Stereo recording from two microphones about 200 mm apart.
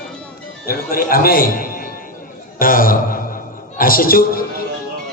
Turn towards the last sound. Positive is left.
turn(degrees=45)  # may be behind; listen again after turning